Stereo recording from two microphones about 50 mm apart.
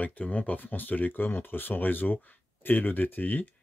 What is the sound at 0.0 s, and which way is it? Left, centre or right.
Speech, left.